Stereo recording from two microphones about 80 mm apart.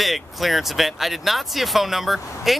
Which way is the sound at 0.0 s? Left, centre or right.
Centre.